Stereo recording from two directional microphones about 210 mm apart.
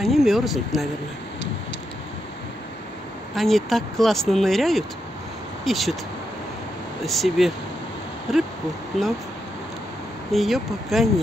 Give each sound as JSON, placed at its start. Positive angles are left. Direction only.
{"t": 0.0, "sound": "speech", "side_deg": 0}
{"t": 3.3, "sound": "speech", "side_deg": 0}
{"t": 7.1, "sound": "speech", "side_deg": 0}
{"t": 10.3, "sound": "speech", "side_deg": 0}